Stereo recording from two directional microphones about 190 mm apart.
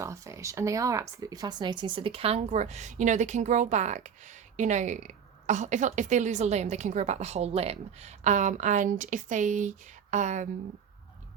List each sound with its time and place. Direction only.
0.0 s speech: 15° right (ahead or behind); by 10.5 s 40° right (ahead or behind)